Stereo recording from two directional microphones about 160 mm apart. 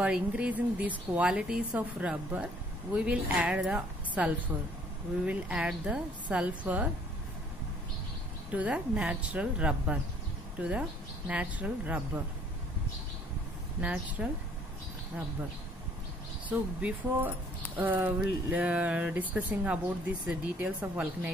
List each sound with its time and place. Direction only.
0.0 s speech: 10° right (ahead or behind)
8.5 s speech: 10° right (ahead or behind)
13.7 s speech: 10° right (ahead or behind)
16.4 s speech: 10° right (ahead or behind)